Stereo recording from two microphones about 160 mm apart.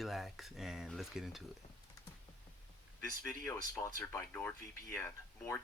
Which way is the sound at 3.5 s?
15° left (ahead or behind).